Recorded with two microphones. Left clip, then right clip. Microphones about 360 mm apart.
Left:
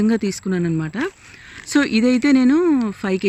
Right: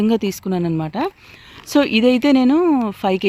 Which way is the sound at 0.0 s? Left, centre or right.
Centre.